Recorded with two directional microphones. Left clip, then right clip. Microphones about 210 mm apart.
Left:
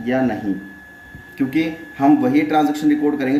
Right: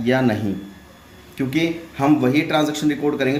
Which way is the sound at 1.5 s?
45° right (ahead or behind).